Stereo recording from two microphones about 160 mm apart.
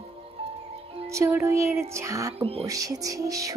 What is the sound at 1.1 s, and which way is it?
Music, 20° right (ahead or behind).